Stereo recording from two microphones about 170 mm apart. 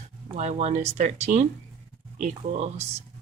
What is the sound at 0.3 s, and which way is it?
Speech, 45° right (ahead or behind).